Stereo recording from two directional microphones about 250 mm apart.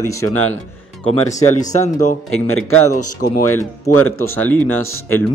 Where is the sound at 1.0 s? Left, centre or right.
Left.